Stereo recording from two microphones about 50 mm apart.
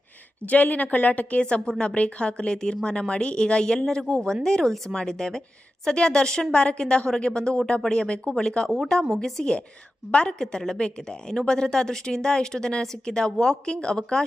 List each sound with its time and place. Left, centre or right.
0.4 s a woman's voice: left
1.5 s a woman's voice: centre
10.4 s a woman's voice: centre